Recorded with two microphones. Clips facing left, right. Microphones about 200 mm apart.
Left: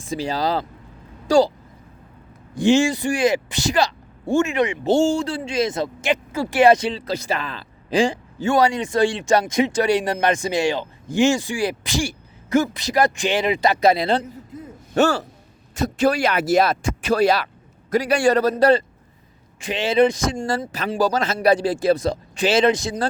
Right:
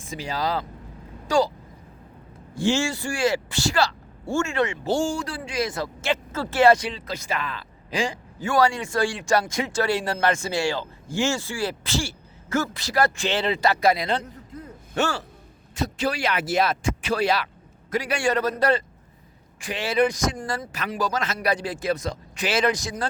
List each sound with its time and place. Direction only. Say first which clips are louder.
0.0 s a man's voice: left 5 dB; 30° left (ahead or behind)
2.6 s a man's voice: left 7 dB; 15° left (ahead or behind)